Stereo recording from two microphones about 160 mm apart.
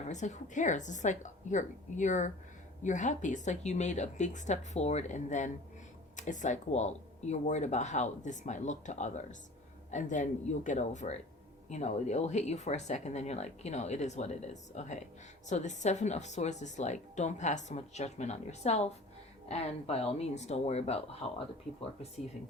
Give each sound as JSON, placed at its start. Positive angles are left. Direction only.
{"t": 0.1, "sound": "speech", "side_deg": 50}